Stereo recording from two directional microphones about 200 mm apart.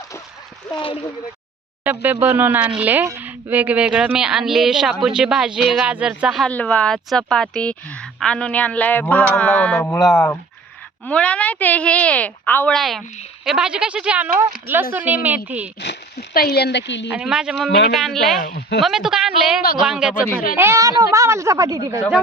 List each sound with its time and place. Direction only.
1.8 s a woman's voice: 10° right (ahead or behind)
15.8 s speech: 55° left (ahead or behind)
17.2 s a woman's voice: 5° right (ahead or behind)
18.3 s speech: 40° left (ahead or behind)
18.8 s a woman's voice: centre (ahead or behind); by 22.0 s 15° right (ahead or behind)